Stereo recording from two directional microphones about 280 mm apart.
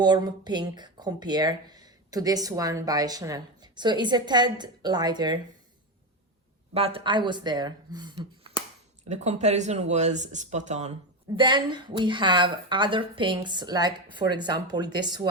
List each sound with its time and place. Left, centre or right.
0.0 s speech: centre
6.7 s speech: centre